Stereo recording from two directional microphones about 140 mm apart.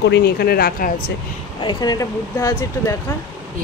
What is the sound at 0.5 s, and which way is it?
Speech, 90° left.